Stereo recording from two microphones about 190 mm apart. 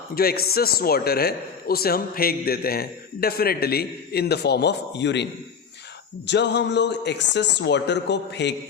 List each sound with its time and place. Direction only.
0.1 s a man's voice: 55° left (ahead or behind)